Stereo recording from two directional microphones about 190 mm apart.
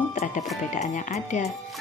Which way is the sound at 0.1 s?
40° left (ahead or behind).